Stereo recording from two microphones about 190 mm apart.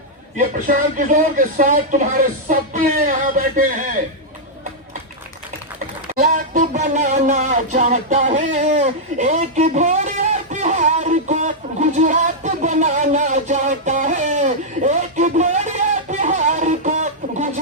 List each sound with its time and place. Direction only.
0.3 s speech: 40° right (ahead or behind)
6.1 s speech: 40° right (ahead or behind)
16.0 s music: 40° right (ahead or behind)